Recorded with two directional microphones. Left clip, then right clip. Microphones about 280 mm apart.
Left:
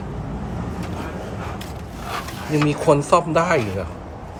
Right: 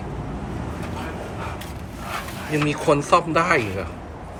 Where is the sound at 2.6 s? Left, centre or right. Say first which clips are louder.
Left 2 dB; centre.